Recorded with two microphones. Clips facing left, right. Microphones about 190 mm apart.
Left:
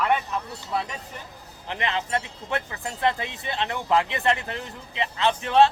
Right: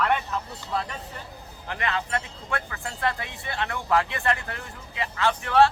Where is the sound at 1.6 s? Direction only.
20° left (ahead or behind).